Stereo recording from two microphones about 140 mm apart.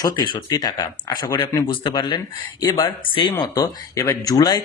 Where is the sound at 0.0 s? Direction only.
30° left (ahead or behind).